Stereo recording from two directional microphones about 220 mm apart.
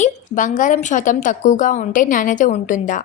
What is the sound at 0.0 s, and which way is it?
A woman's voice, 35° left (ahead or behind).